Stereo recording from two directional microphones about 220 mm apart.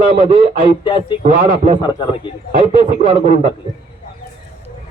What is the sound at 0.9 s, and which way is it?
Speech, 20° left (ahead or behind).